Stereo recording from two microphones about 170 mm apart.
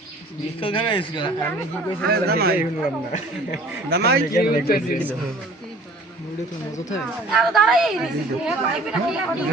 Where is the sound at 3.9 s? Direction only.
70° right (ahead or behind).